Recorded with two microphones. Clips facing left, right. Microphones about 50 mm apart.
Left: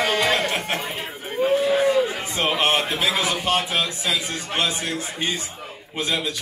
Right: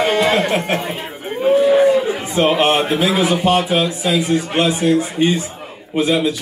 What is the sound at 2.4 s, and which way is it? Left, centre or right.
Speech, centre.